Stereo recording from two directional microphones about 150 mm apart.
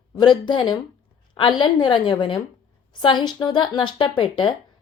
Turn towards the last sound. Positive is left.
turn(degrees=35)  # may be behind; listen again after turning